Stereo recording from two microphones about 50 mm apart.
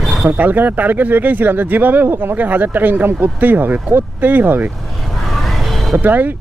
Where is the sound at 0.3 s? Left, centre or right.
Right.